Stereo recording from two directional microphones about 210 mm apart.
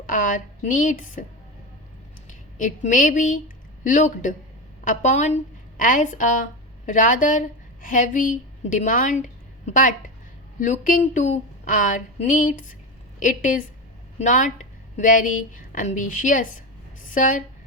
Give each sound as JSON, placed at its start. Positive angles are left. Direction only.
{"t": 0.0, "sound": "a woman's voice", "side_deg": 40}
{"t": 2.6, "sound": "a woman's voice", "side_deg": 40}